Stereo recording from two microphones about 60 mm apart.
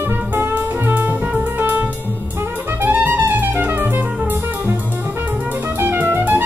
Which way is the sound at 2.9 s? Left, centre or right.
Right.